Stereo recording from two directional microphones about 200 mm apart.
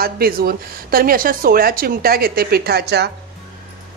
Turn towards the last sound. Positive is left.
turn(degrees=-55)  # may be behind; listen again after turning